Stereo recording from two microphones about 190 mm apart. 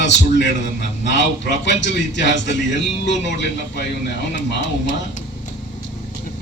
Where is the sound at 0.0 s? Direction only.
70° left (ahead or behind).